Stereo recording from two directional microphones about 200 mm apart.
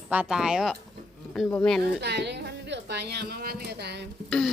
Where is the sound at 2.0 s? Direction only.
60° right (ahead or behind).